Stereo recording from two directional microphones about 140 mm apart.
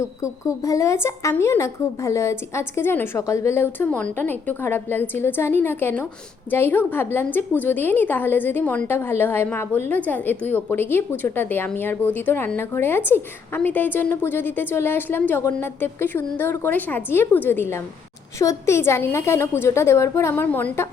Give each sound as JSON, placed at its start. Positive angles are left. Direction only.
{"t": 0.0, "sound": "a woman's voice", "side_deg": 20}